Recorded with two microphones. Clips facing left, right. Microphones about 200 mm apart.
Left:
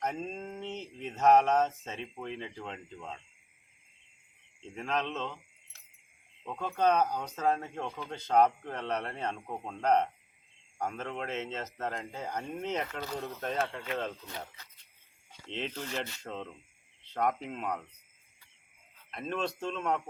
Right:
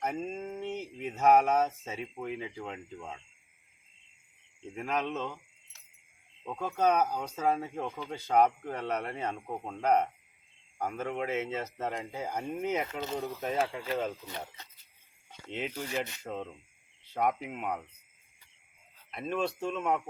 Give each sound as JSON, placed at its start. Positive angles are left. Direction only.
{"t": 0.0, "sound": "speech", "side_deg": -10}
{"t": 4.6, "sound": "speech", "side_deg": -10}
{"t": 6.4, "sound": "speech", "side_deg": -5}
{"t": 12.9, "sound": "speech", "side_deg": -20}
{"t": 13.1, "sound": "speech", "side_deg": -5}
{"t": 15.4, "sound": "speech", "side_deg": -10}
{"t": 19.1, "sound": "speech", "side_deg": -5}